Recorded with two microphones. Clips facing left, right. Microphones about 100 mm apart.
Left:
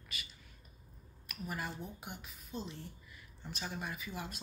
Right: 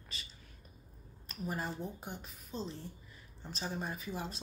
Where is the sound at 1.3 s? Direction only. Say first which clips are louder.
Right 3 dB; 30° right (ahead or behind).